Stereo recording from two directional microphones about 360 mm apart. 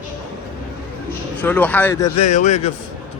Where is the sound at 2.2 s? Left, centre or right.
Centre.